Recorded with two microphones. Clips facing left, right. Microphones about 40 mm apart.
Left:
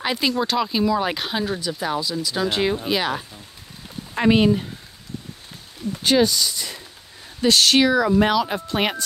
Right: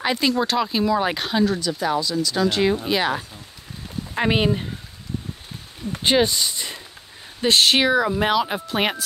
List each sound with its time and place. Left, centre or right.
0.0 s speech: centre
1.4 s speech: centre
4.1 s speech: centre
6.0 s speech: right; by 9.0 s centre